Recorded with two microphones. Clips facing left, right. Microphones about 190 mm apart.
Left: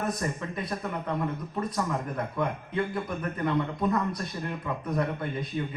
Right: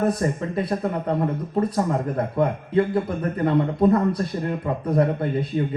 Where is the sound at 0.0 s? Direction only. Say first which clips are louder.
Right 8 dB; 30° right (ahead or behind).